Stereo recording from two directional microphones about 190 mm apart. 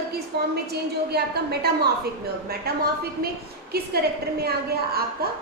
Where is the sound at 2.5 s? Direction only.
55° right (ahead or behind).